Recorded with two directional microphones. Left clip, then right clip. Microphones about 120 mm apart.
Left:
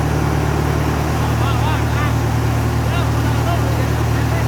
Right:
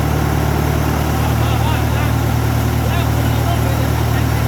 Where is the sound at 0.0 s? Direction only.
25° right (ahead or behind).